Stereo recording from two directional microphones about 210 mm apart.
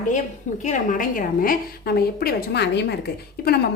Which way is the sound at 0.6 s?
35° left (ahead or behind).